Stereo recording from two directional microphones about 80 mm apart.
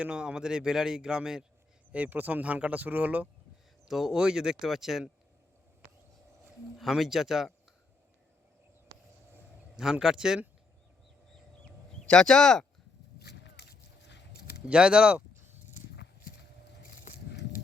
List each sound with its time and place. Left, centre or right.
0.0 s speech: centre
1.9 s speech: centre
3.8 s speech: centre
6.7 s speech: centre
9.7 s speech: centre
12.0 s speech: centre
14.7 s speech: centre
15.4 s a sound: right